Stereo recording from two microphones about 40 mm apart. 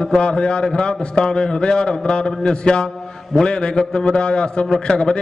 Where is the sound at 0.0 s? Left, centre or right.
Left.